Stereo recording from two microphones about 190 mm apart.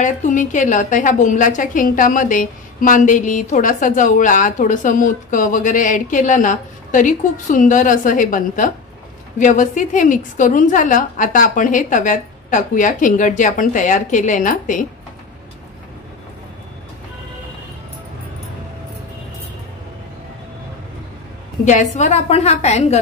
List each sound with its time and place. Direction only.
0.0 s a woman's voice: 40° left (ahead or behind)
21.6 s a woman's voice: 40° left (ahead or behind)